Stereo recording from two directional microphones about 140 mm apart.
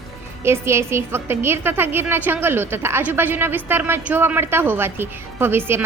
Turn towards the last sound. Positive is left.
turn(degrees=-15)  # may be behind; listen again after turning